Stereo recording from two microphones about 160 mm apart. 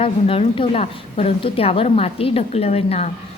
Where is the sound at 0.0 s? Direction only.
35° left (ahead or behind).